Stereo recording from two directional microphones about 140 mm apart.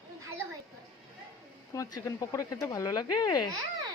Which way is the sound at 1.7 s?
20° left (ahead or behind).